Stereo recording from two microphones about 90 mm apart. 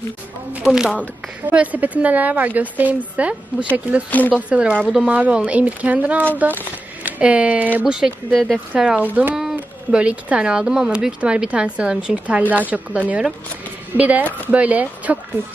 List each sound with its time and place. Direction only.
0.5 s a woman's voice: 10° right (ahead or behind)
7.8 s a woman's voice: 5° right (ahead or behind)
8.4 s speech: 5° left (ahead or behind)
8.8 s a woman's voice: 15° right (ahead or behind)